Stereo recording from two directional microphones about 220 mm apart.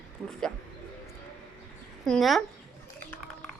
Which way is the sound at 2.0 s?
Centre (ahead or behind).